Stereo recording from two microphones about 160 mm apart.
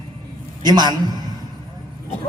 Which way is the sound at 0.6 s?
25° right (ahead or behind).